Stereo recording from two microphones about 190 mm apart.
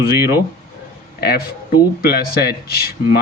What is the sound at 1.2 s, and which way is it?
A man's voice, 55° left (ahead or behind).